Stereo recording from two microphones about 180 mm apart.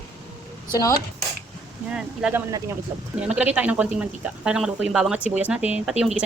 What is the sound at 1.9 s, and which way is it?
Speech, 5° right (ahead or behind).